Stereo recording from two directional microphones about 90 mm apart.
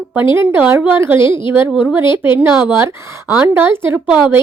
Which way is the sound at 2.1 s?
25° right (ahead or behind).